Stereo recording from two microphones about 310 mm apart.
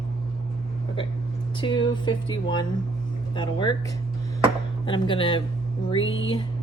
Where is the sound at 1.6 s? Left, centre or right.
Centre.